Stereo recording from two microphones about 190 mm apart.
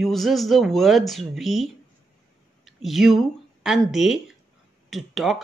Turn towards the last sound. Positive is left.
turn(degrees=0)  # may be behind; listen again after turning